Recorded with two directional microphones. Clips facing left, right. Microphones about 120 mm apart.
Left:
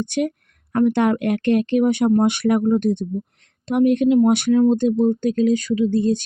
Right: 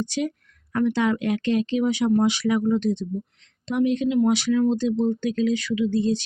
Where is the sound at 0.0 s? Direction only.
55° left (ahead or behind).